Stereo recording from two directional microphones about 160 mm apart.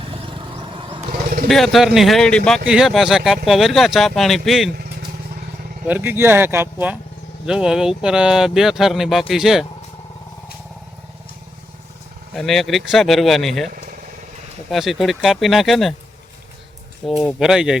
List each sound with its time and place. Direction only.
0.1 s vehicle: 35° right (ahead or behind)
1.5 s speech: centre (ahead or behind)
5.9 s speech: 15° right (ahead or behind)
12.3 s speech: centre (ahead or behind)
14.7 s speech: centre (ahead or behind)
17.0 s speech: centre (ahead or behind)